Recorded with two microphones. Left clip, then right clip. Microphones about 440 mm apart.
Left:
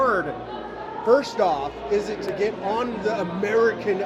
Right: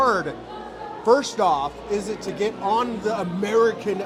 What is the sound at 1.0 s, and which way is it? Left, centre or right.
Speech, right.